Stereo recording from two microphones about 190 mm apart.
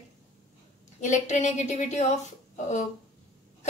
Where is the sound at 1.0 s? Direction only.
40° left (ahead or behind).